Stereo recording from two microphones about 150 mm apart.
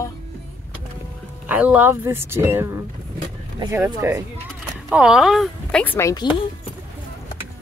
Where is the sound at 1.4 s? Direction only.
10° right (ahead or behind).